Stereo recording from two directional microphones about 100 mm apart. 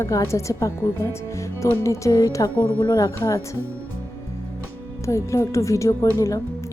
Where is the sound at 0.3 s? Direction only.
30° left (ahead or behind).